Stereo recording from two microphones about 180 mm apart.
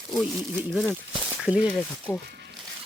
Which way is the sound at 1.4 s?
5° right (ahead or behind).